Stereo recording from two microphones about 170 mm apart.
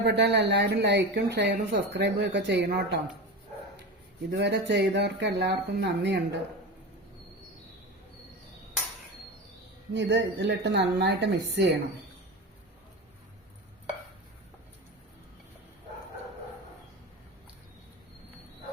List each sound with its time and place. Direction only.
0.0 s a woman's voice: 80° right
4.3 s speech: 80° right
9.9 s a woman's voice: 90° right